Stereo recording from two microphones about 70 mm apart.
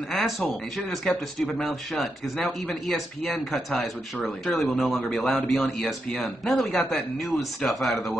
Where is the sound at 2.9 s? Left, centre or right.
Left.